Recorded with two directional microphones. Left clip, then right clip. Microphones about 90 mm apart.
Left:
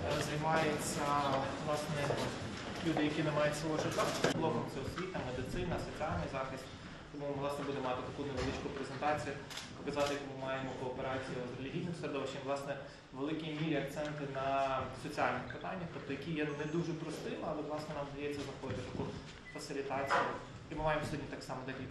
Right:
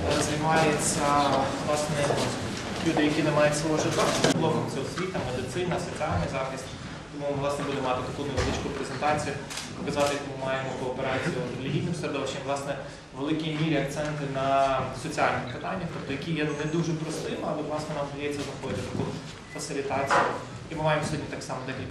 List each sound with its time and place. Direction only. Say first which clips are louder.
0.0 s a man's voice: right 10 dB; 35° right (ahead or behind)
7.4 s a man's voice: right 9 dB; 35° right (ahead or behind)
12.0 s a man's voice: right 7 dB; 35° right (ahead or behind)
19.7 s a man's voice: right 10 dB; 35° right (ahead or behind)